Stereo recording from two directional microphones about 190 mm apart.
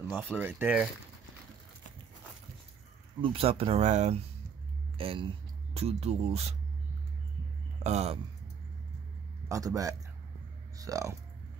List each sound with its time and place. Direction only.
0.0 s speech: 10° right (ahead or behind)
3.2 s speech: 30° right (ahead or behind)
7.8 s speech: 35° right (ahead or behind)
9.5 s speech: 15° right (ahead or behind)